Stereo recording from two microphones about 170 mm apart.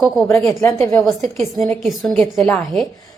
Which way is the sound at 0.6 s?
15° left (ahead or behind).